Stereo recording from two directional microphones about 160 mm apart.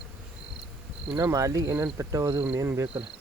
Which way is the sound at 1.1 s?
20° right (ahead or behind).